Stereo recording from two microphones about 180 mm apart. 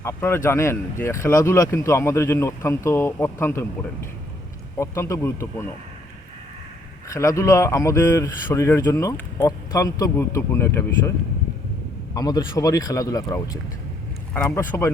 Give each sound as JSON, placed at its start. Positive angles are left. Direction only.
{"t": 0.0, "sound": "speech", "side_deg": 15}
{"t": 4.8, "sound": "speech", "side_deg": 15}
{"t": 7.1, "sound": "speech", "side_deg": 15}
{"t": 12.1, "sound": "speech", "side_deg": 20}